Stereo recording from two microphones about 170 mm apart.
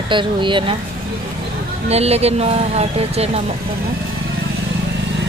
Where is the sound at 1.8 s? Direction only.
40° right (ahead or behind).